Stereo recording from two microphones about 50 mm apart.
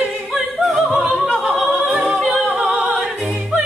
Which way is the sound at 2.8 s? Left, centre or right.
Centre.